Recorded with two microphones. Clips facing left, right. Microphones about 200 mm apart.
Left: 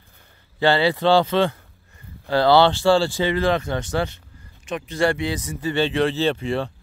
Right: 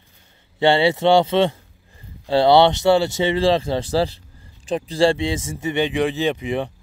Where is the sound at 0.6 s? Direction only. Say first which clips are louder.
Right 2 dB; 25° right (ahead or behind).